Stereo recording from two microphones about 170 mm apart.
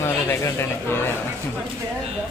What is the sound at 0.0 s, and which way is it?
A man's voice, 15° left (ahead or behind).